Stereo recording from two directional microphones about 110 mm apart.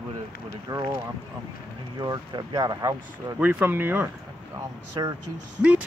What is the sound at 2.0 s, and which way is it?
Speech, 35° right (ahead or behind).